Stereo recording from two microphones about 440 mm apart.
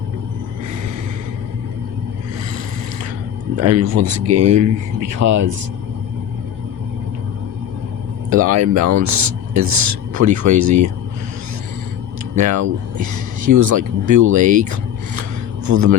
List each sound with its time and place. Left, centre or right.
3.6 s speech: right
8.3 s speech: right
12.4 s speech: right